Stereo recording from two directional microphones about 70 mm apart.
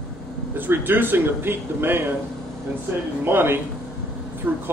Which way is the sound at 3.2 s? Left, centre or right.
Right.